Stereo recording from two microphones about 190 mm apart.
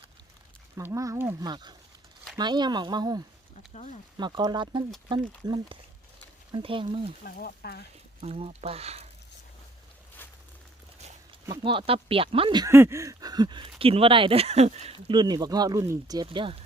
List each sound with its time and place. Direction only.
0.8 s speech: 15° right (ahead or behind)
7.3 s speech: 50° left (ahead or behind)
8.2 s speech: 35° right (ahead or behind)
11.4 s speech: 20° right (ahead or behind)